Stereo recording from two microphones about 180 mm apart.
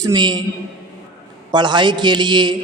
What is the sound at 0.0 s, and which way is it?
Speech, 25° right (ahead or behind).